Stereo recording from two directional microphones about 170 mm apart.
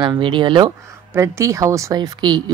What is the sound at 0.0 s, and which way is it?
Speech, 30° right (ahead or behind).